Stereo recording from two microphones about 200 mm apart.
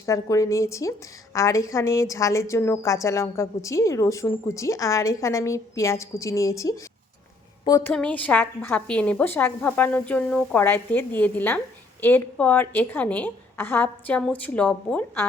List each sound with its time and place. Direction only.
0.0 s a woman's voice: 15° left (ahead or behind)